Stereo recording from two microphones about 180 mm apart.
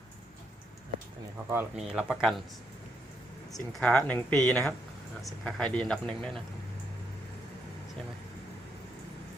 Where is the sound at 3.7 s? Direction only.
5° left (ahead or behind).